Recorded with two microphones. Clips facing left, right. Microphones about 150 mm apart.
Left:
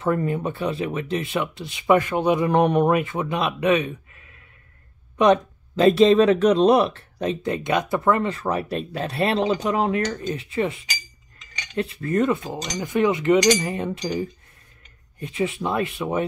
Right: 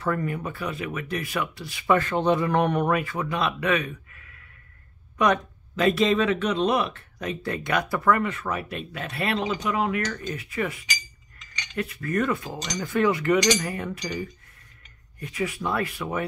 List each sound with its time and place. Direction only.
0.0 s speech: 25° left (ahead or behind)